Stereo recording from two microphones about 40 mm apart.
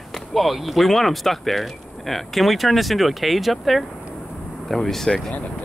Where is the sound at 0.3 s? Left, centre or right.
Centre.